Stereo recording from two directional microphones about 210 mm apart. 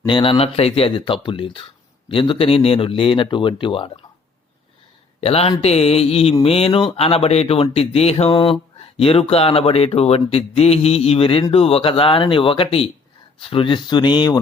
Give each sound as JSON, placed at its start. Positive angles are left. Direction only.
{"t": 0.0, "sound": "speech", "side_deg": 25}
{"t": 5.2, "sound": "speech", "side_deg": 30}